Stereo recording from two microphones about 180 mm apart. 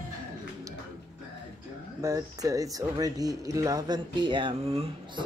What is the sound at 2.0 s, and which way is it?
Speech, 20° right (ahead or behind).